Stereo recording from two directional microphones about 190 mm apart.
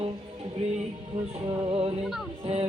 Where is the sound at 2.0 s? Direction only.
Centre (ahead or behind).